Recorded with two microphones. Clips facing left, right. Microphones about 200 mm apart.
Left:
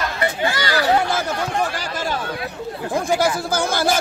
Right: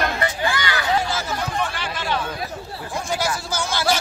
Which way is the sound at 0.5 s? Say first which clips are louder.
Left 7 dB; 40° left (ahead or behind).